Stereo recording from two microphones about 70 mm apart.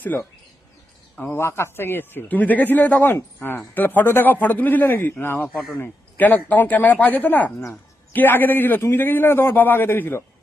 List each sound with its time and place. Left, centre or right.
0.1 s a man's voice: left